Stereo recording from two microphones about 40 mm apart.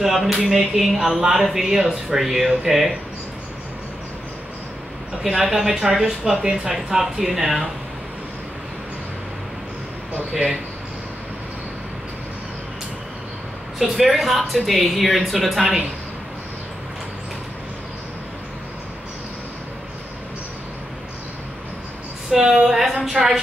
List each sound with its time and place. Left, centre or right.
0.0 s speech: centre
5.2 s speech: centre
13.7 s speech: centre
22.3 s a woman's voice: centre